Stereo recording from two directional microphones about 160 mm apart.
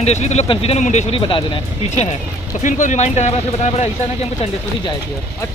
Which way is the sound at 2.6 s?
50° left (ahead or behind).